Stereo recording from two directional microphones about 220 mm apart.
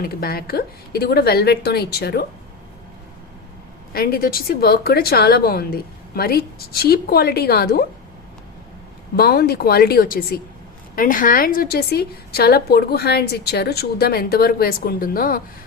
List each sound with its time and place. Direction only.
0.0 s a woman's voice: 45° left (ahead or behind)
3.9 s a woman's voice: 45° left (ahead or behind)
9.1 s a woman's voice: 45° left (ahead or behind)